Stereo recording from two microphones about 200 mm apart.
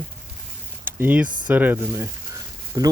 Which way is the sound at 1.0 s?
10° right (ahead or behind).